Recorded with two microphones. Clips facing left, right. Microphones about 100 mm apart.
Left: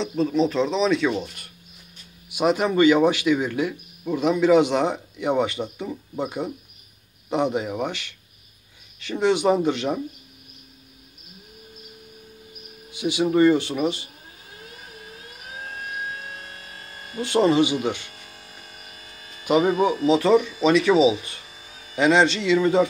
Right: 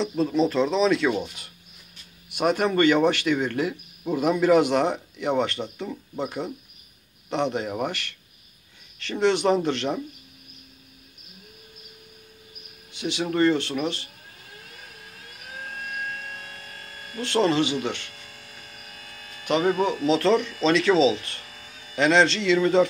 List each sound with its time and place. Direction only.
0.0 s speech: centre (ahead or behind)
4.0 s speech: 10° right (ahead or behind)
12.9 s speech: 10° left (ahead or behind)
16.3 s electric shaver: 25° left (ahead or behind)
17.2 s speech: 10° left (ahead or behind)
18.3 s hum: 25° left (ahead or behind)
19.4 s speech: 15° left (ahead or behind)